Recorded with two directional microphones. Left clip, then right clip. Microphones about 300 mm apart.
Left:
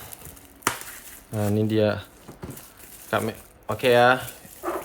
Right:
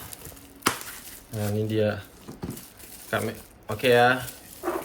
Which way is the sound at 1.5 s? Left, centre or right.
Centre.